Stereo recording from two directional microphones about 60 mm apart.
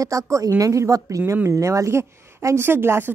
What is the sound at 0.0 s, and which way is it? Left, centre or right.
Speech, right.